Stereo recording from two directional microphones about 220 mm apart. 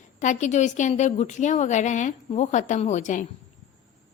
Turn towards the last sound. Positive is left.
turn(degrees=35)  # may be behind; listen again after turning